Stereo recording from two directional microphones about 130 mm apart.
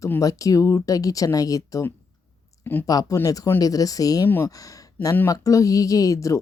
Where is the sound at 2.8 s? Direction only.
25° left (ahead or behind).